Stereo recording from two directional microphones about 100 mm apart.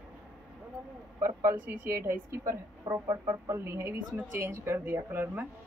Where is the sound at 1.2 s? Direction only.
25° right (ahead or behind).